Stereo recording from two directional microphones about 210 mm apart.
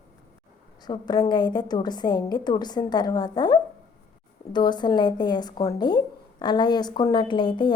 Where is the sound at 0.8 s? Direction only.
20° left (ahead or behind).